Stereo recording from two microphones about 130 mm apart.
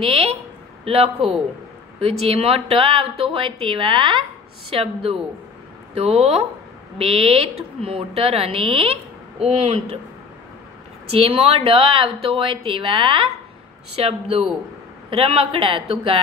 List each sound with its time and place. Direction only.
0.0 s a sound: 45° right (ahead or behind)
0.8 s a woman's voice: 45° right (ahead or behind)
11.1 s a woman's voice: 45° right (ahead or behind)
14.0 s a woman's voice: 50° right (ahead or behind)